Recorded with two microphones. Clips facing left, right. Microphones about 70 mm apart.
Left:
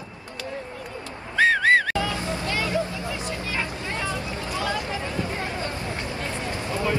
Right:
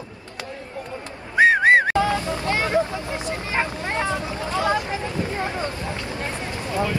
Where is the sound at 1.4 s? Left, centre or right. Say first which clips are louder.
Right 4 dB; right.